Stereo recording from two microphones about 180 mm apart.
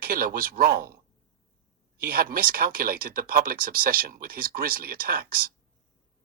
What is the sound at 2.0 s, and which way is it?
Speech, 55° right (ahead or behind).